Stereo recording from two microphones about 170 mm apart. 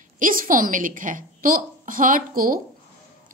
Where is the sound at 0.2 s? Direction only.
55° right (ahead or behind).